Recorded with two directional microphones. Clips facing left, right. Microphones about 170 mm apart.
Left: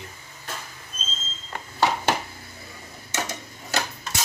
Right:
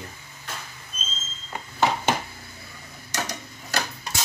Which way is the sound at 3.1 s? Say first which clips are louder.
Left 1 dB; 25° left (ahead or behind).